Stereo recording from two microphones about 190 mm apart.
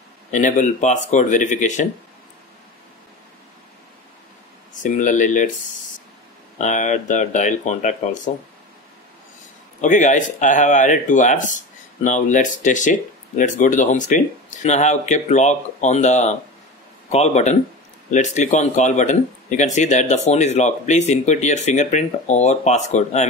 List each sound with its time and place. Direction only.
0.3 s speech: 40° left (ahead or behind)
4.8 s speech: 40° left (ahead or behind)
6.6 s speech: 40° left (ahead or behind)
9.8 s speech: 40° left (ahead or behind)